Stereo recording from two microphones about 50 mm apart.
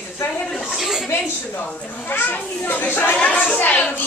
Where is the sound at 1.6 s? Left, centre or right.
Left.